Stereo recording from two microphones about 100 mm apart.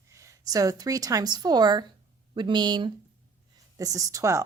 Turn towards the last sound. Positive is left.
turn(degrees=-30)  # may be behind; listen again after turning